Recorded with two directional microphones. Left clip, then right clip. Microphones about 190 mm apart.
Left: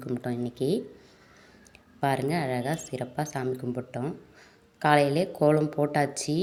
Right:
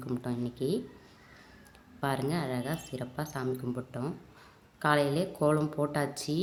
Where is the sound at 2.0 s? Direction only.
20° left (ahead or behind).